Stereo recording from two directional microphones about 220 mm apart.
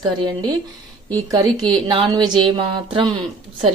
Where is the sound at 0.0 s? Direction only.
20° right (ahead or behind).